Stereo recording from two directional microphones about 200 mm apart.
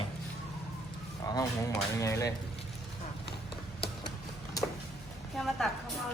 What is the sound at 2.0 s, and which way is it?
Speech, 15° left (ahead or behind).